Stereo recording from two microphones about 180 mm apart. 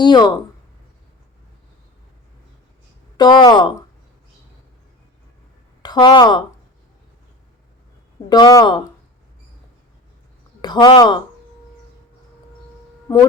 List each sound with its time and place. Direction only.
0.0 s speech: 25° left (ahead or behind)
3.2 s speech: 25° left (ahead or behind)
5.8 s speech: 25° left (ahead or behind)
8.3 s speech: 20° left (ahead or behind)
10.6 s speech: 25° left (ahead or behind)
13.1 s a sound: 20° left (ahead or behind)